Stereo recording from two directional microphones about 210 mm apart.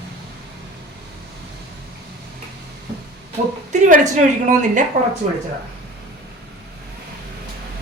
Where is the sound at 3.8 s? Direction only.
35° right (ahead or behind).